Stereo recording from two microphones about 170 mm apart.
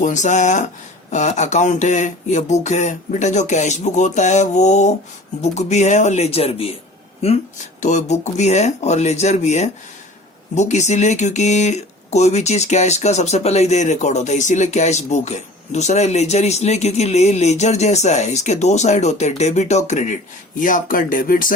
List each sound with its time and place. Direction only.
0.0 s speech: 45° left (ahead or behind)